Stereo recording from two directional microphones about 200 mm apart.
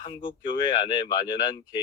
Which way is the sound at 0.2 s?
25° left (ahead or behind).